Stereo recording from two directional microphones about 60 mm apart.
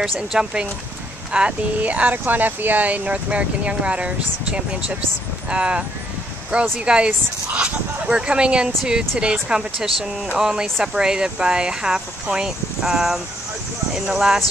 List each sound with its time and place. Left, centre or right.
0.3 s speech: centre